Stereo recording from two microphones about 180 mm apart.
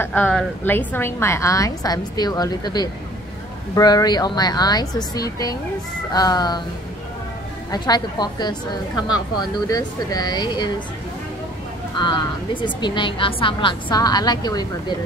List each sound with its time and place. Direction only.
0.0 s a woman's voice: 10° left (ahead or behind)
7.7 s a woman's voice: 25° left (ahead or behind)
12.0 s a woman's voice: 25° left (ahead or behind)